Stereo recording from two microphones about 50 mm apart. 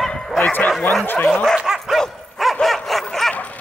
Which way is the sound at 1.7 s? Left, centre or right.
Centre.